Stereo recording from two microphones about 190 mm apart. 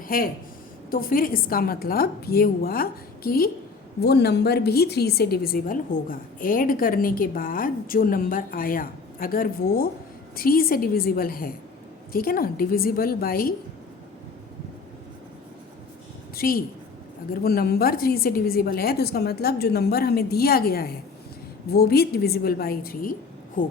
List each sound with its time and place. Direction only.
0.1 s a woman's voice: 50° left (ahead or behind)
16.3 s a woman's voice: 50° left (ahead or behind)